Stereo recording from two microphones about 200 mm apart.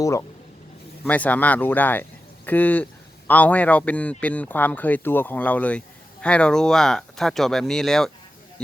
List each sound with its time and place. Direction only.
0.0 s speech: 15° left (ahead or behind)